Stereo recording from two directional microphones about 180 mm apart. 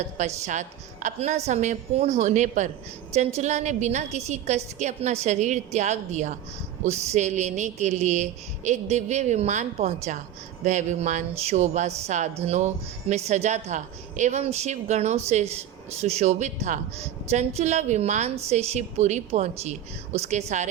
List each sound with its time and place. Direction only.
0.4 s speech: 45° right (ahead or behind)